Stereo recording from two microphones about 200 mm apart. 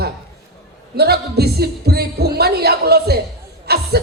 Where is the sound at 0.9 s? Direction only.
55° right (ahead or behind).